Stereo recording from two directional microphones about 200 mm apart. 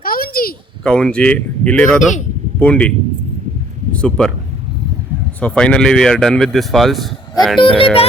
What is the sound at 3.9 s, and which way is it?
A man's voice, 5° left (ahead or behind).